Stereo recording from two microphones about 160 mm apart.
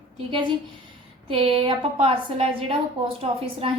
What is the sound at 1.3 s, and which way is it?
A woman's voice, 35° right (ahead or behind).